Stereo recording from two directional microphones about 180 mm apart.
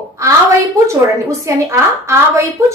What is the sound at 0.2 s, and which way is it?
A woman's voice, 15° right (ahead or behind).